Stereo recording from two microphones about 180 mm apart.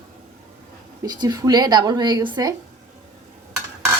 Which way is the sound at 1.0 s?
25° right (ahead or behind).